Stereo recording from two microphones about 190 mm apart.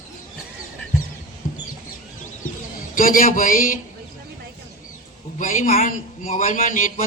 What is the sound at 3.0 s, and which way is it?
Speech, 45° left (ahead or behind).